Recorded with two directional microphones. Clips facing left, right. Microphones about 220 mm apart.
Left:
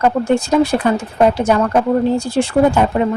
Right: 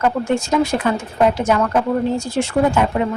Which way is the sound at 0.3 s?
35° left (ahead or behind).